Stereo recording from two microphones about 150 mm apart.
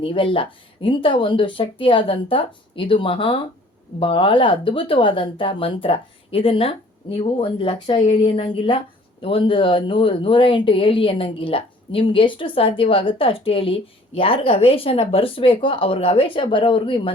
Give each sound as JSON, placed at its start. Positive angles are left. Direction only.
{"t": 0.0, "sound": "speech", "side_deg": 35}